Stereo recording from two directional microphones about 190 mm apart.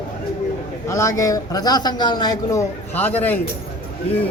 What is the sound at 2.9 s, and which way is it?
Speech, 10° left (ahead or behind).